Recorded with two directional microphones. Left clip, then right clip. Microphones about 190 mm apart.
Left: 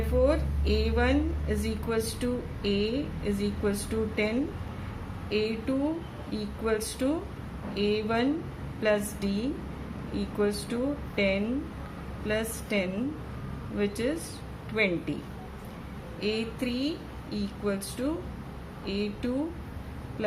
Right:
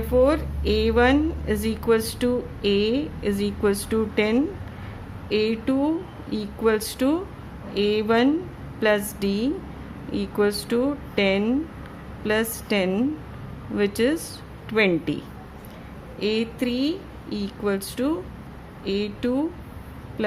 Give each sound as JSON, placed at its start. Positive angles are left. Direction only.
{"t": 0.1, "sound": "a woman's voice", "side_deg": -55}
{"t": 16.2, "sound": "a woman's voice", "side_deg": -50}